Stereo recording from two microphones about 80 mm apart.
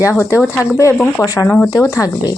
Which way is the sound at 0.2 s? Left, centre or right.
Left.